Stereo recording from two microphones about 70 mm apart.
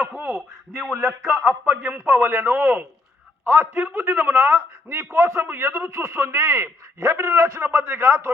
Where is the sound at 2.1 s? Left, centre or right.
Right.